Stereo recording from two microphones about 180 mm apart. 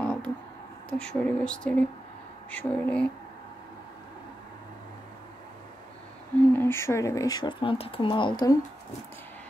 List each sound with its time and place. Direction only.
0.0 s a sound: 10° left (ahead or behind)
0.8 s speech: 5° left (ahead or behind)
6.5 s speech: 15° left (ahead or behind)